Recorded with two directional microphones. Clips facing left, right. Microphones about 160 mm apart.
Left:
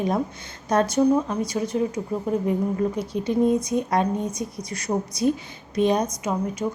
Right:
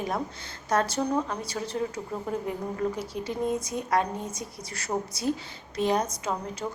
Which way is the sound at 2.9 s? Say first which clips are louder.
Left 8 dB; 20° left (ahead or behind).